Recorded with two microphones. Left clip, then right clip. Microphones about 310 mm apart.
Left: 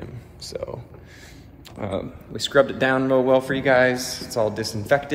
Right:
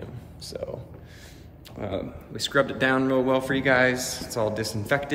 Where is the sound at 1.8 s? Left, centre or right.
Centre.